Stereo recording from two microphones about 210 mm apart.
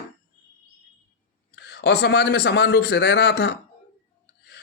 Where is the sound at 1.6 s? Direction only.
55° left (ahead or behind).